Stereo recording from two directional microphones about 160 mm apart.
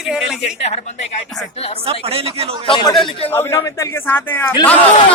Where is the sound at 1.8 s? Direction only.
40° right (ahead or behind).